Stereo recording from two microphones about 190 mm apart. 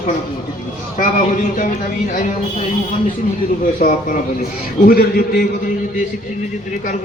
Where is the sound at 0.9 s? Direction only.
45° left (ahead or behind).